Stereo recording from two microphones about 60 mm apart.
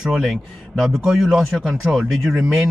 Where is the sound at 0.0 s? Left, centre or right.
Centre.